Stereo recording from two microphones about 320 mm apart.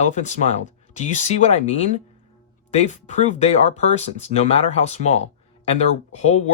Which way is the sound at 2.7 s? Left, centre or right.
Left.